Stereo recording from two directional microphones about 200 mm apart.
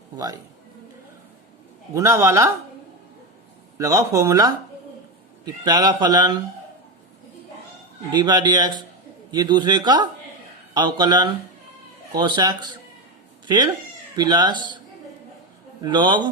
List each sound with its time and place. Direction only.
2.0 s speech: 15° right (ahead or behind)
3.8 s a man's voice: 15° right (ahead or behind)
8.1 s a man's voice: 20° right (ahead or behind)
14.2 s a man's voice: 20° right (ahead or behind)
15.8 s a man's voice: 20° right (ahead or behind)